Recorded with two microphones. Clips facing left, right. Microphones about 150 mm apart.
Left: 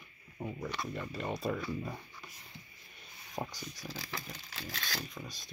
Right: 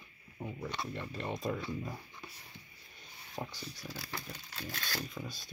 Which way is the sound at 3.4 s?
25° left (ahead or behind).